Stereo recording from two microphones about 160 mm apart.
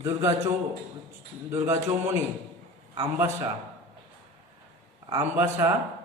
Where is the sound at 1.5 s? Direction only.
15° right (ahead or behind).